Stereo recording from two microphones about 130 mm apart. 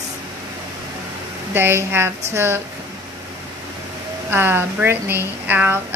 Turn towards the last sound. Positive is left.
turn(degrees=-15)  # may be behind; listen again after turning